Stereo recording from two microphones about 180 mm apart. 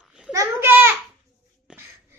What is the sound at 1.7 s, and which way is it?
Wheeze, 5° right (ahead or behind).